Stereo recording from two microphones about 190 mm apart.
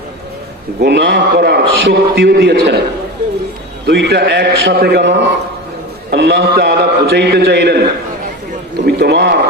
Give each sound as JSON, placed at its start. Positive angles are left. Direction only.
{"t": 0.8, "sound": "a man's voice", "side_deg": -65}
{"t": 3.8, "sound": "a man's voice", "side_deg": -60}
{"t": 8.9, "sound": "a man's voice", "side_deg": -60}